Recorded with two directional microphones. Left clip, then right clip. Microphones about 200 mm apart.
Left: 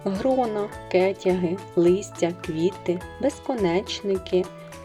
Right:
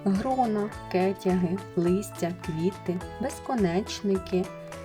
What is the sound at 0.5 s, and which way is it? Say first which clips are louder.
Speech: left 5 dB; 20° left (ahead or behind).